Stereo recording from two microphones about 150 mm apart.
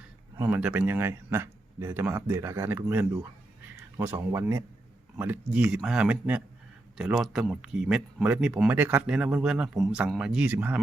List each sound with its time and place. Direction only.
0.3 s speech: 10° right (ahead or behind)